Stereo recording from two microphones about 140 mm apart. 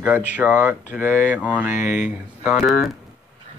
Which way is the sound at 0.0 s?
10° right (ahead or behind).